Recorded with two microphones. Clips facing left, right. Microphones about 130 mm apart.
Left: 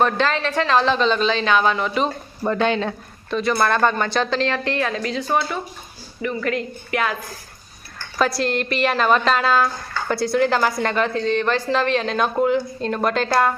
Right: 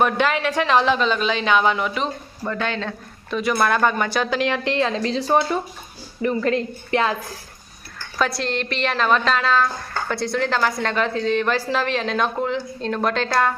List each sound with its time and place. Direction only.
0.0 s speech: 10° right (ahead or behind)
2.5 s speech: 20° left (ahead or behind)
3.2 s a woman's voice: 5° right (ahead or behind); by 7.2 s 25° right (ahead or behind)
8.2 s a woman's voice: centre (ahead or behind)